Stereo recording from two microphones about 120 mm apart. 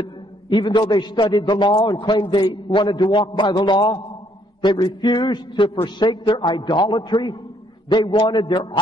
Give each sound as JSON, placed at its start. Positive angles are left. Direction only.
{"t": 0.5, "sound": "a man's voice", "side_deg": 40}